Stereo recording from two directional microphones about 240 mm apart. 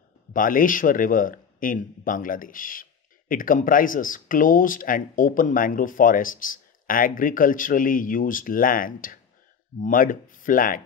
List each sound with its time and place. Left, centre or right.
0.3 s speech: left